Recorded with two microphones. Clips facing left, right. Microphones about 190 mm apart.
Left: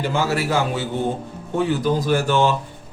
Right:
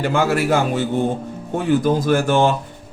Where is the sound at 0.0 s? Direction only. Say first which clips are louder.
Right 3 dB; 55° right (ahead or behind).